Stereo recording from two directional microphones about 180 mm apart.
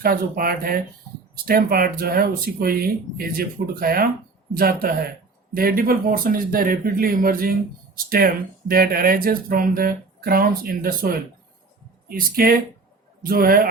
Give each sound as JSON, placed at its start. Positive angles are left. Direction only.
{"t": 0.0, "sound": "speech", "side_deg": -55}